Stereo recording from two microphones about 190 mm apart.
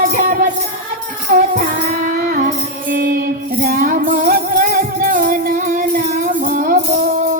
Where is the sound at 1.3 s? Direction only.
45° right (ahead or behind).